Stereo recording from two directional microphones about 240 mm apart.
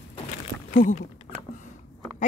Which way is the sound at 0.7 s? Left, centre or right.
Left.